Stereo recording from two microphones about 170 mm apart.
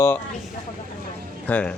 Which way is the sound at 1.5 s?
5° left (ahead or behind).